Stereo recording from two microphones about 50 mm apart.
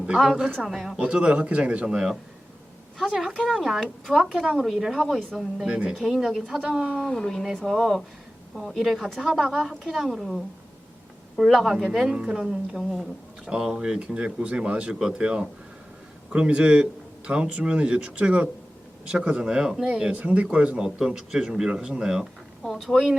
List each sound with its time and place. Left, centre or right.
0.2 s speech: centre
0.7 s a woman's voice: centre
0.9 s speech: centre
3.0 s a woman's voice: centre
5.6 s speech: centre
6.0 s a woman's voice: centre
7.0 s a woman's voice: centre
13.5 s speech: centre
19.5 s speech: centre
20.1 s speech: right; by 22.3 s centre
22.7 s a woman's voice: centre